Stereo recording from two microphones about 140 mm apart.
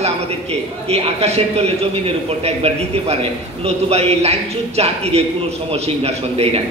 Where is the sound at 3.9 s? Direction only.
50° right (ahead or behind).